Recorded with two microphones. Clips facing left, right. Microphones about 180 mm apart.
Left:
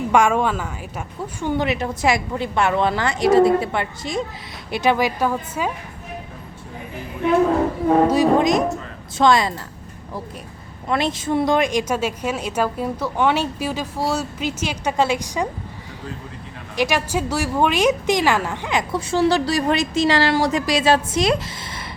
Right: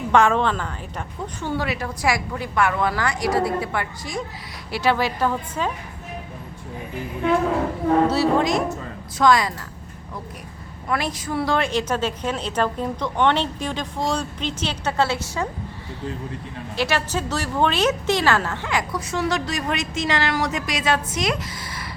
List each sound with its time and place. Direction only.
0.1 s a woman's voice: 10° left (ahead or behind)
8.0 s a woman's voice: 15° left (ahead or behind)
10.8 s a woman's voice: 25° left (ahead or behind)
16.7 s speech: 15° left (ahead or behind)